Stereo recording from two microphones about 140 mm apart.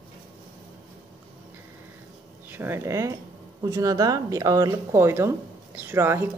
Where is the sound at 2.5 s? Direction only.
15° right (ahead or behind).